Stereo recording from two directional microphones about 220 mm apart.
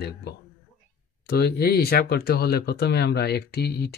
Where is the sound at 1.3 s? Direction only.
45° left (ahead or behind).